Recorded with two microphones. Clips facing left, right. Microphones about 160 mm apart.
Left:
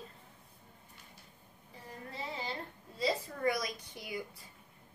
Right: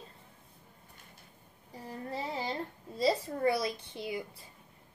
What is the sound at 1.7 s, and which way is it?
A woman's voice, 40° right (ahead or behind).